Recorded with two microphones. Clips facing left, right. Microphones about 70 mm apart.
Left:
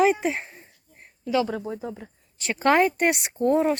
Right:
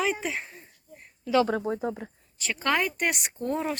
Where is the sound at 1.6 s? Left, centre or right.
Right.